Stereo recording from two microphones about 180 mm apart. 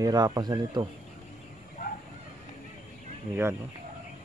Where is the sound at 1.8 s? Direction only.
55° left (ahead or behind).